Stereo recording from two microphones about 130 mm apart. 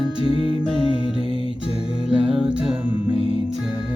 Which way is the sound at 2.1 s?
5° right (ahead or behind).